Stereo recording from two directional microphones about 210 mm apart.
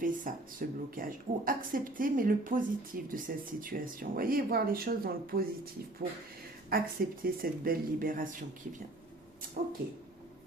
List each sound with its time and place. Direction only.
0.0 s speech: 40° right (ahead or behind)
6.7 s speech: 45° right (ahead or behind)
9.6 s speech: 40° right (ahead or behind)